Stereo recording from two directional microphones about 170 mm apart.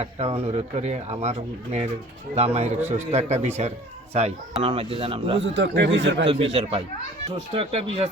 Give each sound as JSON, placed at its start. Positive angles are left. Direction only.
{"t": 0.0, "sound": "speech", "side_deg": -35}
{"t": 5.4, "sound": "speech", "side_deg": -90}
{"t": 6.2, "sound": "speech", "side_deg": -35}